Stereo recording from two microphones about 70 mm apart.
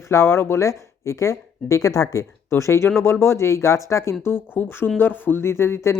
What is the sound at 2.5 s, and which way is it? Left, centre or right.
Speech, left.